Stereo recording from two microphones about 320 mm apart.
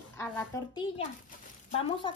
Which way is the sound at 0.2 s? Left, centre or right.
Centre.